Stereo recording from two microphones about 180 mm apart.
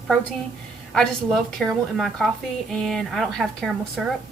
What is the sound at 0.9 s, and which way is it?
A woman's voice, centre (ahead or behind).